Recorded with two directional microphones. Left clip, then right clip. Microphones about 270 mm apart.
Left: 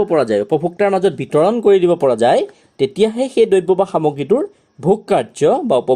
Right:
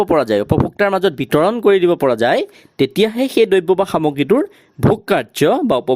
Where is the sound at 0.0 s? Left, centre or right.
Right.